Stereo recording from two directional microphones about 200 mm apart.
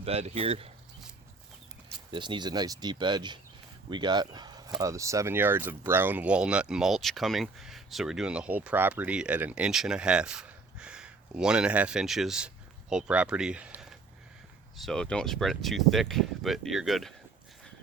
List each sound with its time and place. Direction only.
0.0 s speech: 30° right (ahead or behind)
2.0 s speech: 25° right (ahead or behind); by 17.2 s centre (ahead or behind)